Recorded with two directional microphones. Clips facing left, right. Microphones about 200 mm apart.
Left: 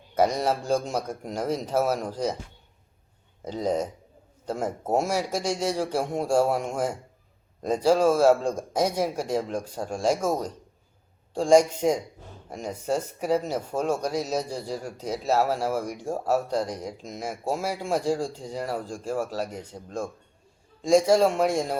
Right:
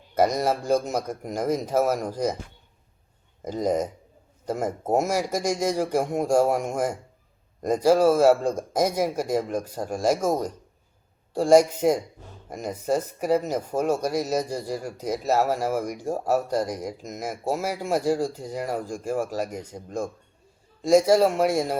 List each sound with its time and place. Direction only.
0.1 s speech: 10° right (ahead or behind)
3.4 s speech: 10° right (ahead or behind)